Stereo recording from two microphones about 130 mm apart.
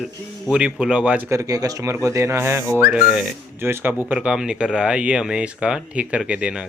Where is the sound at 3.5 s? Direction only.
15° right (ahead or behind).